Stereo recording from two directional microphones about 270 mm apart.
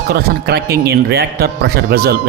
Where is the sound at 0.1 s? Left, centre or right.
Right.